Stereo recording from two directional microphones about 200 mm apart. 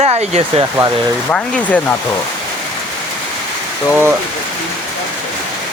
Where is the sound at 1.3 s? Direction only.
5° left (ahead or behind).